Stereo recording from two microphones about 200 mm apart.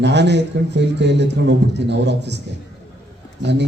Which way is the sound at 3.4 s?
60° right (ahead or behind).